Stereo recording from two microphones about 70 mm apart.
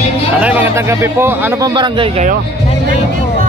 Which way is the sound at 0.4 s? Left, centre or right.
Centre.